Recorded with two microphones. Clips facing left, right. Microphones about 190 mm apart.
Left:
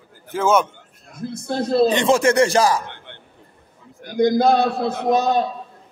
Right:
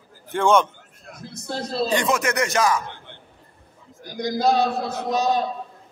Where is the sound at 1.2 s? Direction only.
55° left (ahead or behind).